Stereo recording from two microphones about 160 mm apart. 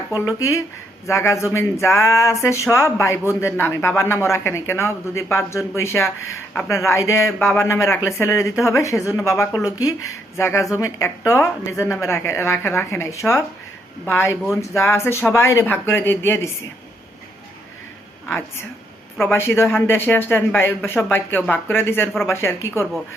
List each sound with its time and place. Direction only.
0.1 s a man's voice: 20° left (ahead or behind)
19.2 s a man's voice: 15° left (ahead or behind)